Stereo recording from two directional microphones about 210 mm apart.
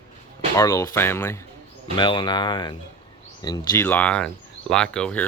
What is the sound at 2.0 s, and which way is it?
Speech, 20° left (ahead or behind).